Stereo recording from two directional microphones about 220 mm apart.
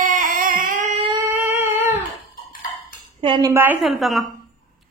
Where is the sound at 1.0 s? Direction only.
10° right (ahead or behind).